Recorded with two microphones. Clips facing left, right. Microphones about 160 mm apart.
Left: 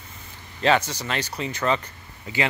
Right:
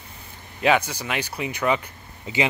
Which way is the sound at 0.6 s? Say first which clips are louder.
Even; 10° right (ahead or behind).